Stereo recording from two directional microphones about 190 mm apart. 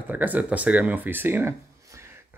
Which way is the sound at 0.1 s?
10° right (ahead or behind).